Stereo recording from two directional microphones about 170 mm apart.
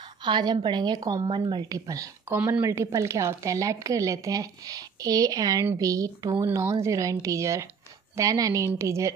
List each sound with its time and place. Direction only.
0.2 s a woman's voice: 25° right (ahead or behind)